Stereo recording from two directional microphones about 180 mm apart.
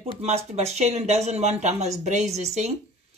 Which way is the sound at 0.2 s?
35° right (ahead or behind).